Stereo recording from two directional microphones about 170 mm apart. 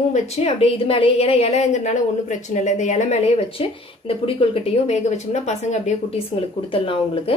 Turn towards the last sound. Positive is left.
turn(degrees=35)  # may be behind; listen again after turning